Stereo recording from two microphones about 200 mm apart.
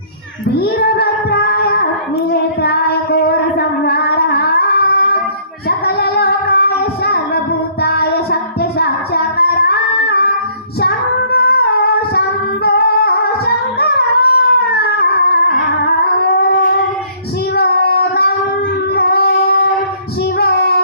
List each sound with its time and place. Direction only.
0.6 s child singing: 50° left (ahead or behind)
3.8 s music: 55° left (ahead or behind)
5.6 s singing: 50° left (ahead or behind)
7.8 s child singing: 55° left (ahead or behind)
10.8 s female singing: 55° left (ahead or behind)
12.6 s music: 55° left (ahead or behind)
17.5 s child singing: 55° left (ahead or behind)
18.9 s music: 55° left (ahead or behind)